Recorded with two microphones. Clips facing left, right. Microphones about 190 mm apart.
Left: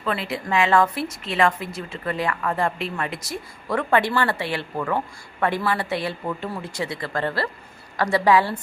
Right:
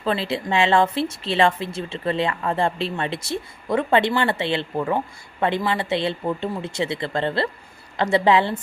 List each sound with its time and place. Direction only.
0.0 s a woman's voice: 30° right (ahead or behind)